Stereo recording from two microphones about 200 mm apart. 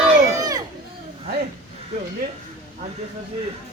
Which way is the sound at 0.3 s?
20° right (ahead or behind).